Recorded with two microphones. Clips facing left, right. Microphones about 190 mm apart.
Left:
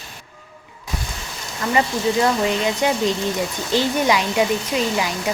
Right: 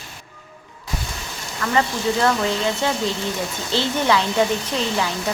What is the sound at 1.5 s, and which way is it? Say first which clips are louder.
Speech: left 1 dB; 15° left (ahead or behind).